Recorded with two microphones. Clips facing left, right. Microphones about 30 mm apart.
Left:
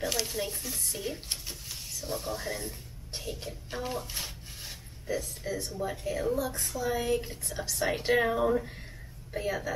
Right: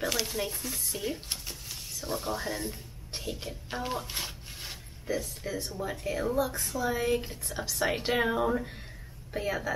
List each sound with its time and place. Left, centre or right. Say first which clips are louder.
0.0 s a sound: right 1 dB; centre
2.0 s speech: right 2 dB; centre
5.0 s speech: even; centre